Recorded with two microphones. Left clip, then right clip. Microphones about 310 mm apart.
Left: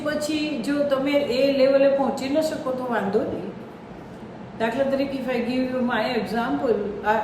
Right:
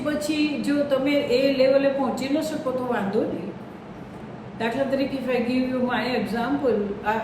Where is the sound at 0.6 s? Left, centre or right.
Centre.